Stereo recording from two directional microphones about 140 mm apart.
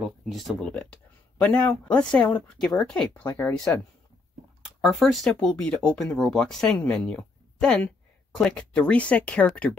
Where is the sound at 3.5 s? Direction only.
5° left (ahead or behind).